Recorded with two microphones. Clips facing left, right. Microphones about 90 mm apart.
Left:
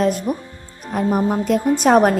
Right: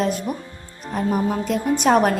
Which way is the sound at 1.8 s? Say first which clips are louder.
Left 3 dB; 40° left (ahead or behind).